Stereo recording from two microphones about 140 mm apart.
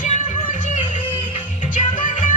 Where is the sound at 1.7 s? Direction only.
70° left (ahead or behind).